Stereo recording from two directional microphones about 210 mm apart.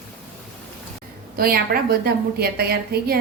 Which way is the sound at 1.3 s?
45° right (ahead or behind).